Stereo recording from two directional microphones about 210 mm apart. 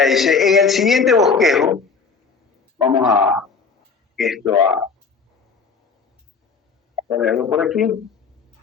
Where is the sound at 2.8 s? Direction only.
20° right (ahead or behind).